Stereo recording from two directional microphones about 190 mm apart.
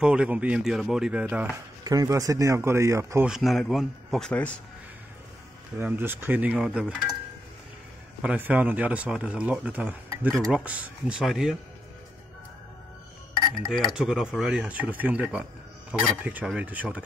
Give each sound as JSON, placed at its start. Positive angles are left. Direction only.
{"t": 0.0, "sound": "speech", "side_deg": -5}
{"t": 1.9, "sound": "speech", "side_deg": -20}
{"t": 3.3, "sound": "speech", "side_deg": 0}
{"t": 5.8, "sound": "speech", "side_deg": -10}
{"t": 8.2, "sound": "speech", "side_deg": -5}
{"t": 13.9, "sound": "speech", "side_deg": -5}